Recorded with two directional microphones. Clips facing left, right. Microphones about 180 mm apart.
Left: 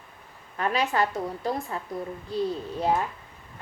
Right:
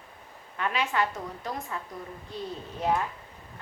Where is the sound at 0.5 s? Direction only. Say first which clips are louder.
Left 3 dB; 40° left (ahead or behind).